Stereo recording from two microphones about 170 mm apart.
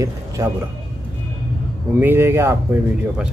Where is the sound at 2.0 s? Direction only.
15° right (ahead or behind).